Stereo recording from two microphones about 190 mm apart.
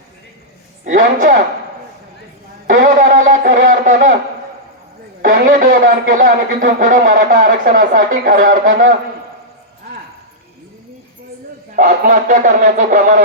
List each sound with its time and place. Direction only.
0.9 s a man's voice: 45° right (ahead or behind)
2.6 s a sound: 45° right (ahead or behind)
5.2 s a man's voice: 45° right (ahead or behind)
11.8 s speech: 40° right (ahead or behind)